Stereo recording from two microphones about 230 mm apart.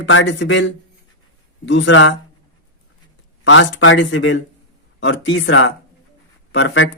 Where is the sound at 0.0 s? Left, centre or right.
Left.